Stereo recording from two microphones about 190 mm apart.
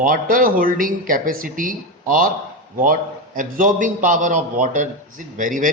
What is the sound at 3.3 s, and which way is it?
A man's voice, 45° right (ahead or behind).